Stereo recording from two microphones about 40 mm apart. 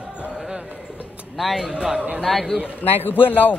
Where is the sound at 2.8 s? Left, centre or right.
Left.